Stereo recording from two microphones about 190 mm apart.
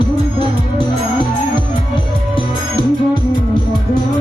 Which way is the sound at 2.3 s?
25° left (ahead or behind).